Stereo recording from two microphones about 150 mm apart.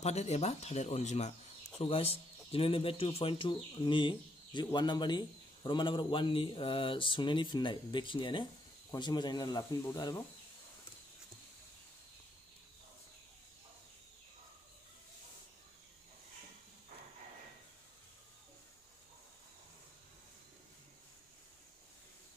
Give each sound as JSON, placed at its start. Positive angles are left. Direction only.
{"t": 0.0, "sound": "a man's voice", "side_deg": 45}